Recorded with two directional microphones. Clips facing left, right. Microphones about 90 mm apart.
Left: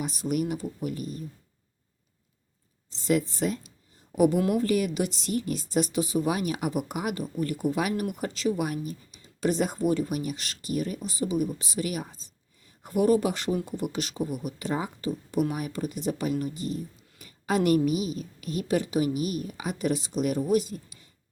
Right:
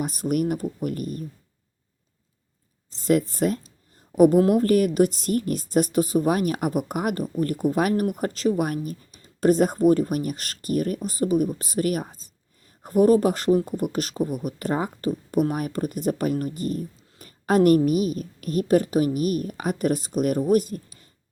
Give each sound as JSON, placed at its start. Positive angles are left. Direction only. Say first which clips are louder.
{"t": 0.0, "sound": "a woman's voice", "louder": "right 4 dB", "side_deg": -50}
{"t": 2.9, "sound": "a woman's voice", "louder": "right 4 dB", "side_deg": -45}